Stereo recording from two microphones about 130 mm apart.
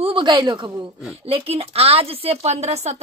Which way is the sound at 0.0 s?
40° right (ahead or behind).